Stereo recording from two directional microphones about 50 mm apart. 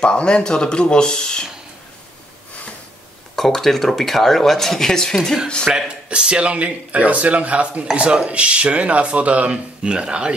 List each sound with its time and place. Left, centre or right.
0.0 s speech: centre
3.3 s speech: centre
5.7 s speech: centre